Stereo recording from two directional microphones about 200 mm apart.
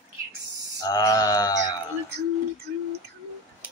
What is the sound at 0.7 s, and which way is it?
Mantra, 20° left (ahead or behind).